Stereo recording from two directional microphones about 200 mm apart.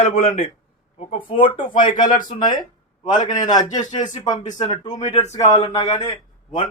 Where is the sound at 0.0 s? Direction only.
30° left (ahead or behind).